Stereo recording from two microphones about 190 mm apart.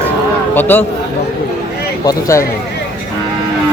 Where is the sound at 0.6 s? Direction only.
10° left (ahead or behind).